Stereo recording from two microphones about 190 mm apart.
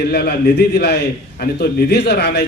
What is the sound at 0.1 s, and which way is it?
A man's voice, 55° left (ahead or behind).